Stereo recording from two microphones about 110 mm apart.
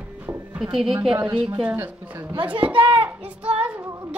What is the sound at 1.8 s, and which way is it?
Speech, 20° right (ahead or behind).